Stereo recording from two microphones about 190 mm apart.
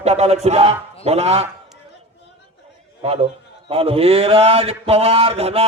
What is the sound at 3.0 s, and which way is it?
A man's voice, 30° right (ahead or behind).